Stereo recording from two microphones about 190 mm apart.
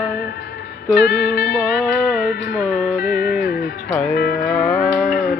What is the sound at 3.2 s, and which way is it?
Music, 50° left (ahead or behind).